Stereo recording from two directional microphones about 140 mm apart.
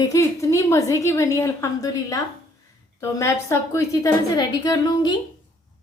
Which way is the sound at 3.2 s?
20° left (ahead or behind).